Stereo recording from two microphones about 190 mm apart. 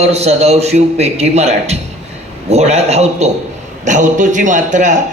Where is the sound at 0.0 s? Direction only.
35° right (ahead or behind).